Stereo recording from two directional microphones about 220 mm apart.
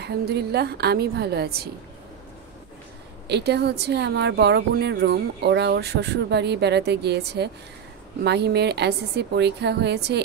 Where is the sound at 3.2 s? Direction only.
50° right (ahead or behind).